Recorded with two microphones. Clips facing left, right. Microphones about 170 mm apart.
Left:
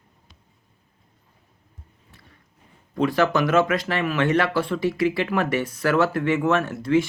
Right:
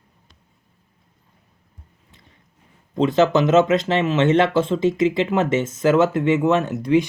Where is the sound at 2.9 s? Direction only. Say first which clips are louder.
Right 4 dB; 20° right (ahead or behind).